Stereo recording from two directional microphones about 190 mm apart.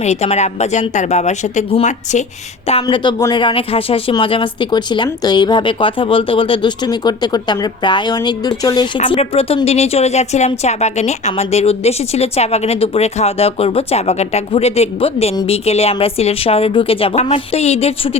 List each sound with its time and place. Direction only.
0.0 s speech: 35° left (ahead or behind)
2.8 s speech: 25° left (ahead or behind)